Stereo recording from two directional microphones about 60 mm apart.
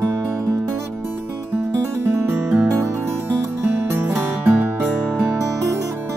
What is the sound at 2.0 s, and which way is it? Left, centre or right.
Music, right.